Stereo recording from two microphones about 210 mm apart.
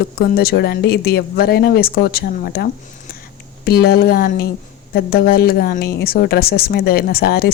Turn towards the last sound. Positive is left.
turn(degrees=50)  # may be behind; listen again after turning